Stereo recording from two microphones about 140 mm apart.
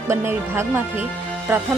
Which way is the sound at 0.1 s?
20° right (ahead or behind).